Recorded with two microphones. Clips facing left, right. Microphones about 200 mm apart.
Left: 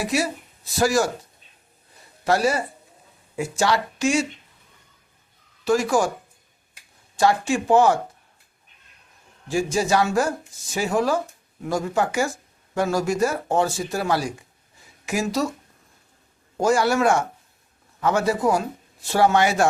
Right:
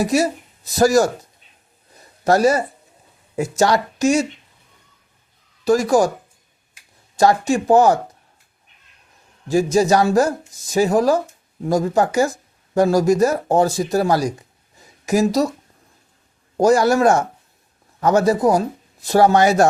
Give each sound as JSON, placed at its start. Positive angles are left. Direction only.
{"t": 0.0, "sound": "speech", "side_deg": -40}
{"t": 2.2, "sound": "speech", "side_deg": -45}
{"t": 5.6, "sound": "speech", "side_deg": -40}
{"t": 7.2, "sound": "speech", "side_deg": -40}
{"t": 9.5, "sound": "speech", "side_deg": -40}
{"t": 16.6, "sound": "speech", "side_deg": -40}